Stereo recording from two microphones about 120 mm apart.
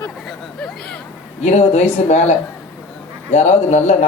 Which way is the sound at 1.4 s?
65° left (ahead or behind).